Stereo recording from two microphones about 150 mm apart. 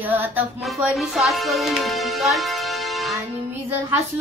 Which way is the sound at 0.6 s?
5° right (ahead or behind).